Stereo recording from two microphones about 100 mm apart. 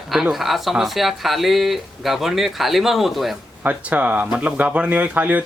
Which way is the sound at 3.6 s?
15° right (ahead or behind).